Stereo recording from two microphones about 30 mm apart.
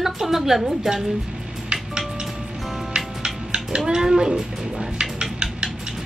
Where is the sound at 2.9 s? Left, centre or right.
Right.